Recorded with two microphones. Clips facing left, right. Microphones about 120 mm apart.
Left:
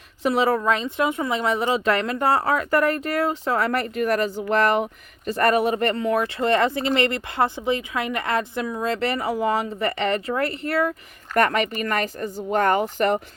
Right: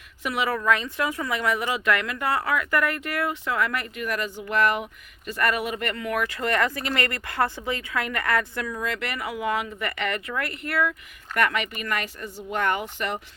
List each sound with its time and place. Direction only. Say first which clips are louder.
0.2 s speech: left 6 dB; 30° left (ahead or behind)